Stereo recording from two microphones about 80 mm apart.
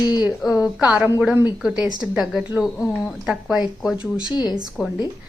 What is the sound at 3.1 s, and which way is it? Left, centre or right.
Speech, centre.